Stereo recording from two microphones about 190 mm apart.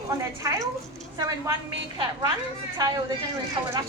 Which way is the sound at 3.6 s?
25° right (ahead or behind).